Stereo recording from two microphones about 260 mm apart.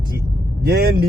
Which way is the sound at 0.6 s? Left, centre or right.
Right.